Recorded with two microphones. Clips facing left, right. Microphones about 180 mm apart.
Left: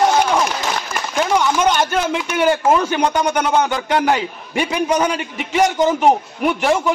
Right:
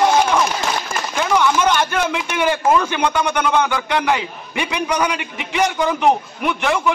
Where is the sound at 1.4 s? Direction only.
40° left (ahead or behind).